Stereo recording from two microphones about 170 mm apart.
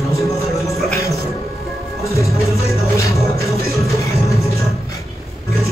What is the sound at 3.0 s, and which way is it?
Music, 20° left (ahead or behind).